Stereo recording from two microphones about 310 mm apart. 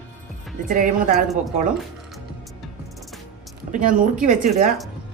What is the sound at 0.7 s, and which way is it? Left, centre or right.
Speech, right.